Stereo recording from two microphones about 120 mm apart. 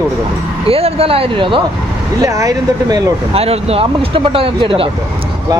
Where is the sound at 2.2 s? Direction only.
25° right (ahead or behind).